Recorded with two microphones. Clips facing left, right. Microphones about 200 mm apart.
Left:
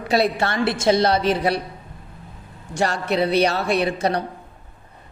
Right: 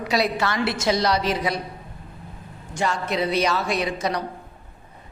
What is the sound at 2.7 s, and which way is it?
A woman's voice, 70° left (ahead or behind).